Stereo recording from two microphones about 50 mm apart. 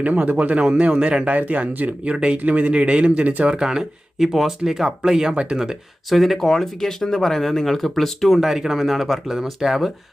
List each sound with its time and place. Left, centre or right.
0.0 s a man's voice: right
2.0 s a man's voice: right
3.6 s speech: centre
6.1 s speech: centre